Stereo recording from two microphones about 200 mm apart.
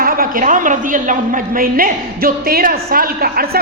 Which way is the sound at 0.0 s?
45° right (ahead or behind).